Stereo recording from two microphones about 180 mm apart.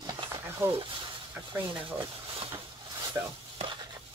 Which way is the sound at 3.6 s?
25° right (ahead or behind).